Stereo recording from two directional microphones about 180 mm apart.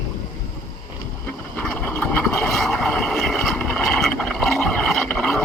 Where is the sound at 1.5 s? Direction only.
5° left (ahead or behind).